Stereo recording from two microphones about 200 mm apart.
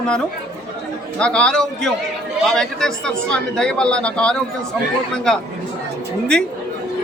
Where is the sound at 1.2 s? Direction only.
5° left (ahead or behind).